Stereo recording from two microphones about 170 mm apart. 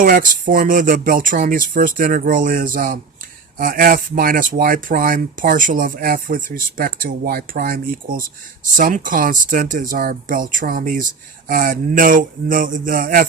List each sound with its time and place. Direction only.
0.0 s speech: 55° right (ahead or behind)